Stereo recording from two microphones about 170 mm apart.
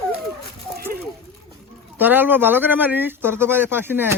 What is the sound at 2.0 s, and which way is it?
Speech, 10° right (ahead or behind).